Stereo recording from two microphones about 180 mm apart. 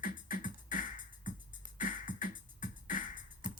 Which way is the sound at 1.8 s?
45° left (ahead or behind).